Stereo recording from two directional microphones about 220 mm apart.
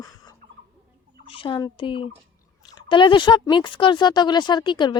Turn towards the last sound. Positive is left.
turn(degrees=20)  # may be behind; listen again after turning